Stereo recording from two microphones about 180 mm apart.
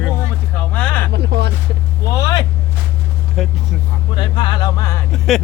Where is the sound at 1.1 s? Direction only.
70° right (ahead or behind).